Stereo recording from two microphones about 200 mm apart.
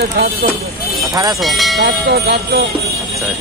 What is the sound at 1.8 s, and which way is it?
Speech, 55° right (ahead or behind).